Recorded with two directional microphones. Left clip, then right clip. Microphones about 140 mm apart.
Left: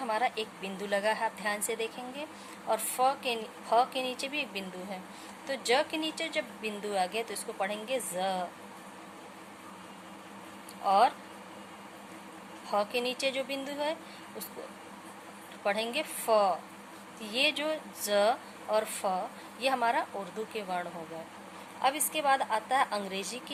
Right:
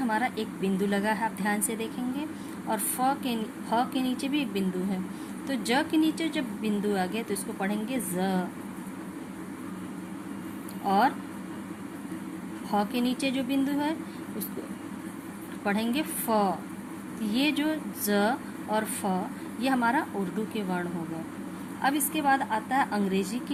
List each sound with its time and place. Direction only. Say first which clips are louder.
0.1 s a woman's voice: right 2 dB; 30° left (ahead or behind)
10.8 s a woman's voice: even; 30° left (ahead or behind)
12.7 s a woman's voice: right 2 dB; 30° left (ahead or behind)
15.6 s a woman's voice: right 1 dB; 30° left (ahead or behind)